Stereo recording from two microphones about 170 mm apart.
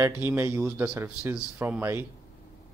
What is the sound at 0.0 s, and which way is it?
Speech, 15° right (ahead or behind).